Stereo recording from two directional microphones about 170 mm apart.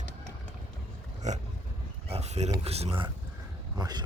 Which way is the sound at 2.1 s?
40° right (ahead or behind).